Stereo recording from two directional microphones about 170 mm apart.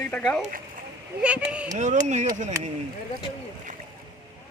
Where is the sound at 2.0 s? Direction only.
45° right (ahead or behind).